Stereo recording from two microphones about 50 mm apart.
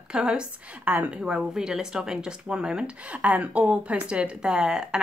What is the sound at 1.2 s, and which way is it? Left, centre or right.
A woman's voice, centre.